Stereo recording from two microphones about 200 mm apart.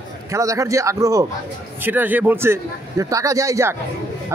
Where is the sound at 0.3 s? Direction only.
15° right (ahead or behind).